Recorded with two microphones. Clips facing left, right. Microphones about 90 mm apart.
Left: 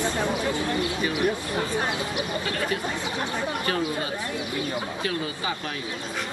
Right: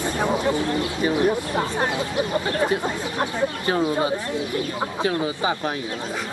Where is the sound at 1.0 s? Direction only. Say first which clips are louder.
Right 5 dB; 30° right (ahead or behind).